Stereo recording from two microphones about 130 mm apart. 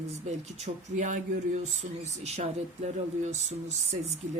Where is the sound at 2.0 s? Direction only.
60° right (ahead or behind).